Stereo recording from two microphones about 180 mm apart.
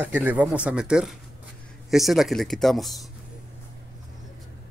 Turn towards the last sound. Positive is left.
turn(degrees=0)  # may be behind; listen again after turning